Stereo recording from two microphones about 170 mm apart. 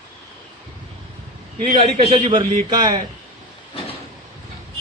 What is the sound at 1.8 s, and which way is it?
Speech, 35° right (ahead or behind).